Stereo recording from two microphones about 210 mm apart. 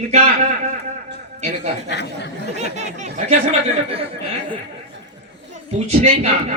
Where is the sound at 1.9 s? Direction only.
55° left (ahead or behind).